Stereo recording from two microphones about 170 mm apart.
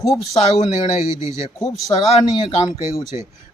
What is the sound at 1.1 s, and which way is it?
Speech, 15° right (ahead or behind).